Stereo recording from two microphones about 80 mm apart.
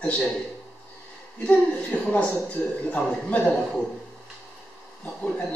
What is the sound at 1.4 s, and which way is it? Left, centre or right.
A man's voice, centre.